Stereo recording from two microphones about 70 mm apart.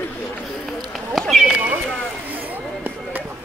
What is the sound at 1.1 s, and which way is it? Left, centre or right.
Run, centre.